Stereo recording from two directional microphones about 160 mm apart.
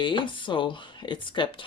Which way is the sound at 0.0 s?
30° left (ahead or behind).